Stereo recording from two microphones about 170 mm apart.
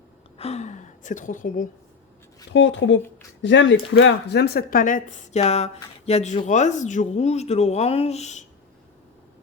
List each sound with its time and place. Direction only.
0.3 s a woman's voice: 35° left (ahead or behind)
2.5 s speech: 90° left; by 8.4 s 40° left (ahead or behind)